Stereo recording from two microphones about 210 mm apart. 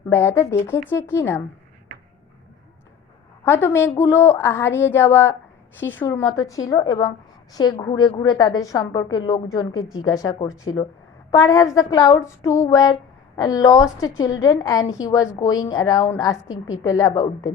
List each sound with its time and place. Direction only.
0.1 s a woman's voice: 10° left (ahead or behind)
3.4 s a woman's voice: 10° left (ahead or behind)